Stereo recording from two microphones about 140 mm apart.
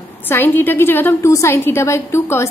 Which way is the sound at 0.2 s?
15° left (ahead or behind).